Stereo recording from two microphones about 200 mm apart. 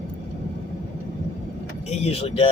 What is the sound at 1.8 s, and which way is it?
Speech, 30° left (ahead or behind).